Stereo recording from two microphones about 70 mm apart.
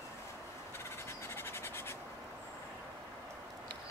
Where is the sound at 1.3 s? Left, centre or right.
Left.